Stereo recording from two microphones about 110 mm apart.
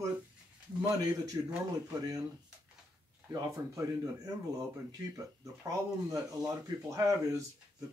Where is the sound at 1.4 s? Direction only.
40° right (ahead or behind).